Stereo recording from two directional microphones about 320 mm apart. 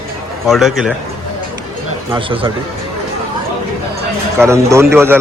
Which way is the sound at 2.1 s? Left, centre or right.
Centre.